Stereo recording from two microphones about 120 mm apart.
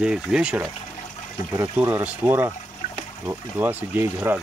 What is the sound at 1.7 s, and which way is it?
Speech, 15° right (ahead or behind).